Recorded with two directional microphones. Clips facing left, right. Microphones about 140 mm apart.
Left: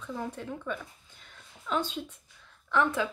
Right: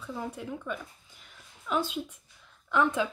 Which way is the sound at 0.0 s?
10° right (ahead or behind).